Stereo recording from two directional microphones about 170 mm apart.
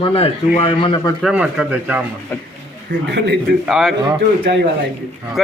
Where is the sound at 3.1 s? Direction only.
90° right.